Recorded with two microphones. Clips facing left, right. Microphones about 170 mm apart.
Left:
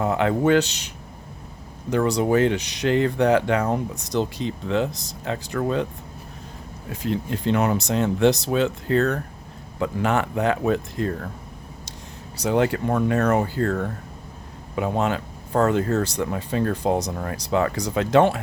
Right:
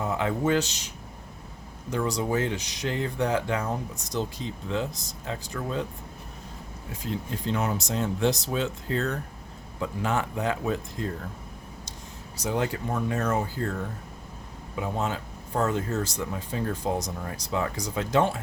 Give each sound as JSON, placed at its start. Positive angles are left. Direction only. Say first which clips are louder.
{"t": 0.0, "sound": "speech", "louder": "left 6 dB", "side_deg": 65}
{"t": 1.9, "sound": "speech", "louder": "left 7 dB", "side_deg": 65}
{"t": 6.9, "sound": "speech", "louder": "left 7 dB", "side_deg": 70}
{"t": 12.4, "sound": "speech", "louder": "left 7 dB", "side_deg": 70}